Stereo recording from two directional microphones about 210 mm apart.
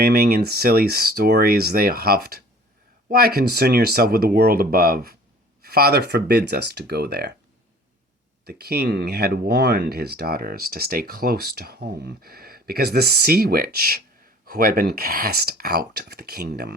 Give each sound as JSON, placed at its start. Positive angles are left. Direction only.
{"t": 0.0, "sound": "speech", "side_deg": -45}
{"t": 8.4, "sound": "speech", "side_deg": -50}